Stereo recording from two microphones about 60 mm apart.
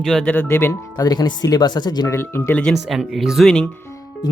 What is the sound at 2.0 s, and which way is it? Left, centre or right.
Speech, left.